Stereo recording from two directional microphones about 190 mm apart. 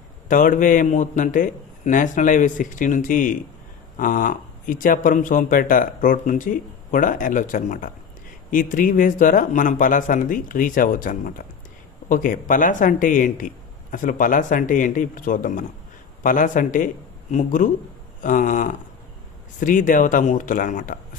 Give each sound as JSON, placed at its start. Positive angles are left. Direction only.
{"t": 0.3, "sound": "a man's voice", "side_deg": 45}